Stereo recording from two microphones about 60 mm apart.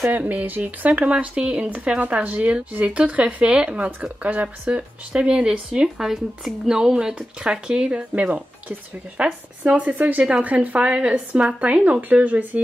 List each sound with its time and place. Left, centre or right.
0.2 s speech: right
5.1 s a woman's voice: centre